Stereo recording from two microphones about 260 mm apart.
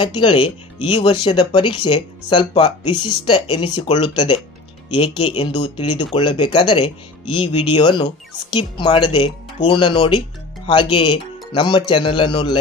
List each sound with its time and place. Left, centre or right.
0.0 s speech: centre